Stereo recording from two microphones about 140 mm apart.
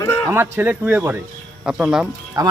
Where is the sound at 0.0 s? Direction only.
25° left (ahead or behind).